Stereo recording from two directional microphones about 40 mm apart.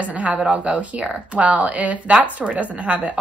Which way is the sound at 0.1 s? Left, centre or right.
Right.